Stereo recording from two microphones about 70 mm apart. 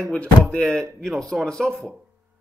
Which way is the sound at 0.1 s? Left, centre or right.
Centre.